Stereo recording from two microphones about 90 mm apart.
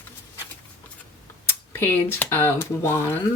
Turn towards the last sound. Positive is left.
turn(degrees=30)  # may be behind; listen again after turning